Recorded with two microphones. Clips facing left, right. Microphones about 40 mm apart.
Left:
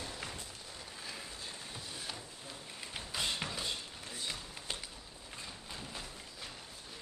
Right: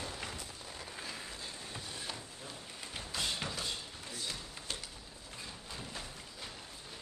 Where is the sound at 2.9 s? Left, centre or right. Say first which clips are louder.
Left 1 dB; centre.